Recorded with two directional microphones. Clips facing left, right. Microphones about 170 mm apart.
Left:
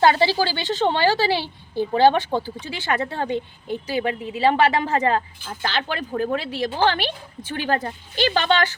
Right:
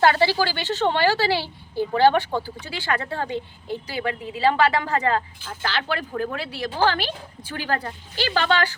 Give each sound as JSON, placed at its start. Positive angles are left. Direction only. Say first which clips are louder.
{"t": 0.0, "sound": "a woman's voice", "louder": "left 1 dB", "side_deg": 15}